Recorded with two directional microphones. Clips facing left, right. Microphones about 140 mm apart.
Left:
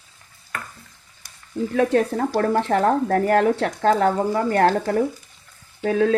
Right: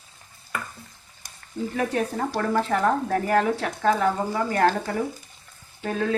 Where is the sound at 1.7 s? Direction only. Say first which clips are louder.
Left 7 dB; 60° left (ahead or behind).